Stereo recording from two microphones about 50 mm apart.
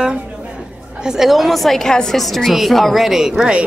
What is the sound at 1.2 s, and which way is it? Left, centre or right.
A woman's voice, centre.